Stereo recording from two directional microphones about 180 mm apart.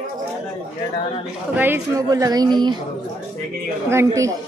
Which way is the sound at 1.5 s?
10° right (ahead or behind).